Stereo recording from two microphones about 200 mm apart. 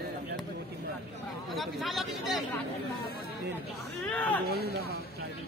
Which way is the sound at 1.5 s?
Centre (ahead or behind).